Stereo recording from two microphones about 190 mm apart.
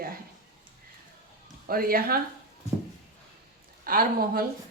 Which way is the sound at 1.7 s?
50° right (ahead or behind).